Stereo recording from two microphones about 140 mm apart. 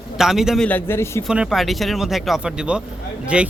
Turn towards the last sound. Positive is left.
turn(degrees=-10)  # may be behind; listen again after turning